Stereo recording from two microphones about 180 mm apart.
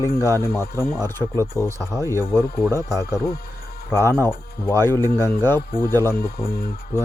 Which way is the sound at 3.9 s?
15° left (ahead or behind).